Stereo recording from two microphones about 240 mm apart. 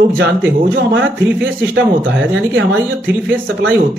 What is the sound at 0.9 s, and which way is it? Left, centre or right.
Speech, right.